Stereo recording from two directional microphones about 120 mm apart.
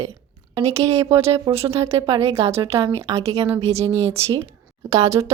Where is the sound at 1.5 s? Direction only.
45° right (ahead or behind).